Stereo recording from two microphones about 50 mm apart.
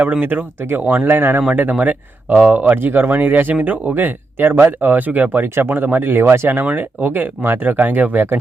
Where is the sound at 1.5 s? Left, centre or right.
Right.